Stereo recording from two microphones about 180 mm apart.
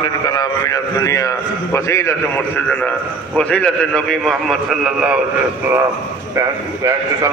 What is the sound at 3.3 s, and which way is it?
A man's voice, 5° left (ahead or behind).